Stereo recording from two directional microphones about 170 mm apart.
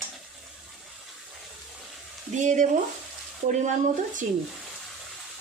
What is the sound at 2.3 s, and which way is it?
Speech, 45° right (ahead or behind).